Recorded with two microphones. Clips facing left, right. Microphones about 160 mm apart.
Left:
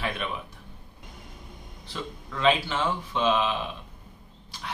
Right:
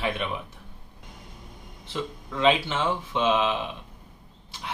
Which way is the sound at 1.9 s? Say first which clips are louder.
Right 4 dB; 20° right (ahead or behind).